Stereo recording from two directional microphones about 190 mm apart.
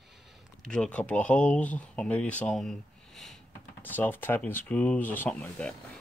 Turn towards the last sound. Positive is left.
turn(degrees=5)  # may be behind; listen again after turning